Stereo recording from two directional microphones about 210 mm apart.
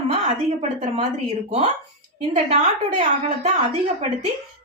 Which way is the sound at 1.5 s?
30° right (ahead or behind).